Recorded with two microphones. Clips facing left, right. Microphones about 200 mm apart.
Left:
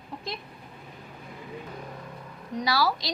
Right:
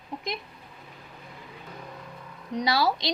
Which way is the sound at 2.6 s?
20° right (ahead or behind).